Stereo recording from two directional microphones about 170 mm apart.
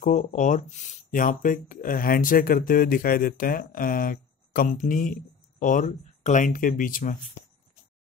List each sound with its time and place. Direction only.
0.0 s speech: 45° left (ahead or behind)